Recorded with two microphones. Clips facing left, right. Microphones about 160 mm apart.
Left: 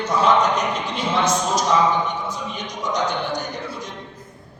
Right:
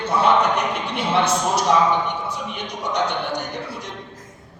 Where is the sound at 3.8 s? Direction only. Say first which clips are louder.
Even; 85° right.